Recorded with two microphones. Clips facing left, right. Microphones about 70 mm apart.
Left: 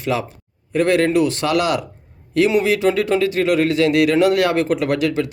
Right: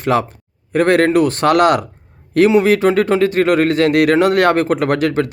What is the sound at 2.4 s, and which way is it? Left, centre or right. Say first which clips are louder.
Speech: right 5 dB; right.